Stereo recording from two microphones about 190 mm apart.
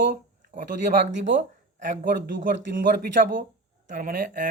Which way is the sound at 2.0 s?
45° right (ahead or behind).